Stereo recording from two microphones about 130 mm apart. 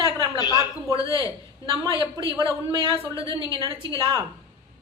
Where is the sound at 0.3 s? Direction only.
30° left (ahead or behind).